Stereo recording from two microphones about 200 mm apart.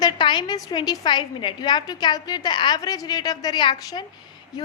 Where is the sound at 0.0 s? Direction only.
20° left (ahead or behind).